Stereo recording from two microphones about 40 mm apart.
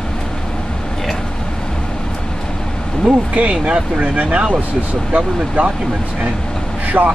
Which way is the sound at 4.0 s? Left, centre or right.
Right.